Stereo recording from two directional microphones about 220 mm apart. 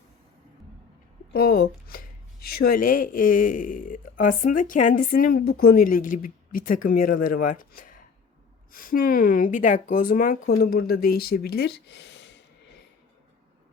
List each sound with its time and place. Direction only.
1.3 s speech: 45° left (ahead or behind)